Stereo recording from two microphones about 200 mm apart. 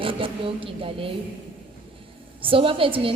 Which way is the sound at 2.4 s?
25° right (ahead or behind).